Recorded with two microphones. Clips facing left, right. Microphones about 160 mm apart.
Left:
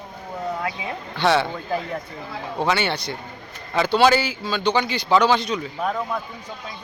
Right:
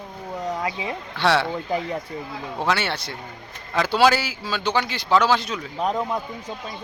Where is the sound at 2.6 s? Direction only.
Centre (ahead or behind).